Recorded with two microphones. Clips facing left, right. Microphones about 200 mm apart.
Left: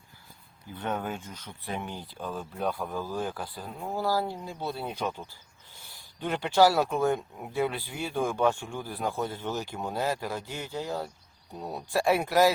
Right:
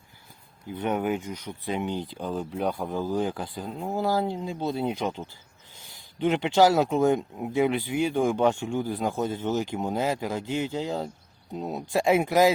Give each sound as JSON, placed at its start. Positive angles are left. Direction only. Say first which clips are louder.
{"t": 0.8, "sound": "speech", "louder": "right 6 dB", "side_deg": -15}